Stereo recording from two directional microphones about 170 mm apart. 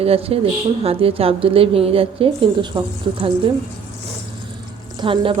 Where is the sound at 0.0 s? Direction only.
35° right (ahead or behind).